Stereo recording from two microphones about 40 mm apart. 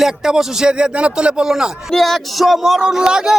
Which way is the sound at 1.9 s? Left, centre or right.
Centre.